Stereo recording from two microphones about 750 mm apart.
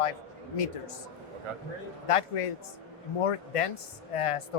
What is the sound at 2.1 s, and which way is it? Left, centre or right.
A woman's voice, left.